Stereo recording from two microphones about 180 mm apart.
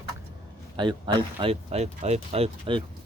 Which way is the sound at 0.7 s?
25° right (ahead or behind).